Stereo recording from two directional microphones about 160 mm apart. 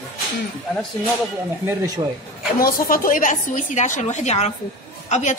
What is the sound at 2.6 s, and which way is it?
A woman's voice, 65° left (ahead or behind).